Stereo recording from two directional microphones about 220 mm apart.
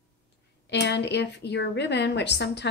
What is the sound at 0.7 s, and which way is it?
A woman's voice, 50° left (ahead or behind).